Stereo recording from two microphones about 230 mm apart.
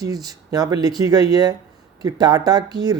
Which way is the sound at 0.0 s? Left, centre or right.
Centre.